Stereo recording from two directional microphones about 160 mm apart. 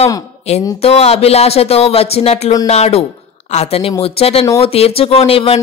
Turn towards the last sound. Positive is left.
turn(degrees=35)  # may be behind; listen again after turning